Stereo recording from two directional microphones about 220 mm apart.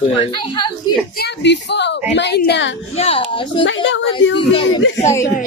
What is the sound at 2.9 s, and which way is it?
Speech, 25° left (ahead or behind).